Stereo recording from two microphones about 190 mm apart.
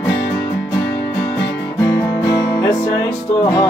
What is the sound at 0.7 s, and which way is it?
Music, 15° left (ahead or behind).